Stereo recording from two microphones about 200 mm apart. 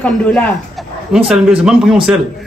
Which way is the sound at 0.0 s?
5° left (ahead or behind).